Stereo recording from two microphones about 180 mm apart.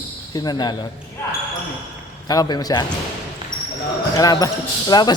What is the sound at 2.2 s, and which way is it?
Speech, 20° left (ahead or behind).